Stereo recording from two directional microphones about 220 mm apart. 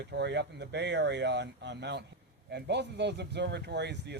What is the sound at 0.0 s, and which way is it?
Speech, 50° right (ahead or behind).